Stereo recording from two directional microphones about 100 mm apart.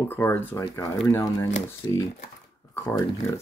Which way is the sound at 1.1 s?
35° left (ahead or behind).